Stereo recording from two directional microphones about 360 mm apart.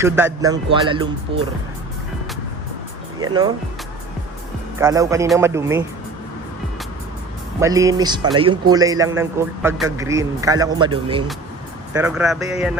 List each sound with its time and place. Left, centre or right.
0.4 s speech: centre
3.2 s speech: centre
4.8 s speech: centre
7.6 s speech: centre
11.9 s speech: centre